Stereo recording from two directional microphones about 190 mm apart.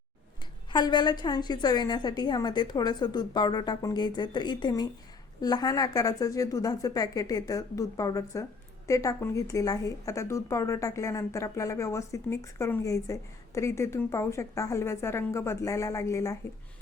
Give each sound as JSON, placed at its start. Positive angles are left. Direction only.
{"t": 0.7, "sound": "a woman's voice", "side_deg": 25}